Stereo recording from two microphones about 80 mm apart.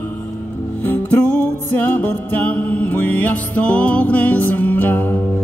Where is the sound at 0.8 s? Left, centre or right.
Left.